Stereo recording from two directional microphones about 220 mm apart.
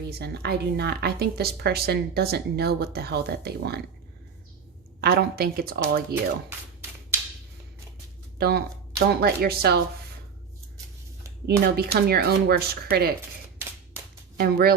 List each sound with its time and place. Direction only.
0.1 s a woman's voice: 45° right (ahead or behind)
4.9 s a woman's voice: 45° right (ahead or behind)
8.4 s a woman's voice: 45° right (ahead or behind)
11.4 s a woman's voice: 45° right (ahead or behind)
14.3 s a woman's voice: 45° right (ahead or behind)